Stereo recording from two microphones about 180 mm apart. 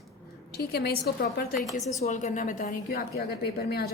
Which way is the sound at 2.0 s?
40° left (ahead or behind).